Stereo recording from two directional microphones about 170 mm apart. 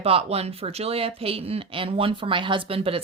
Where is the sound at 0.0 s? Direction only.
35° right (ahead or behind).